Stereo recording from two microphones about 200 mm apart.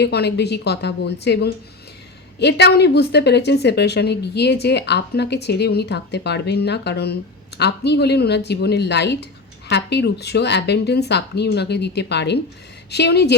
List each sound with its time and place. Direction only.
0.0 s a woman's voice: 55° left (ahead or behind)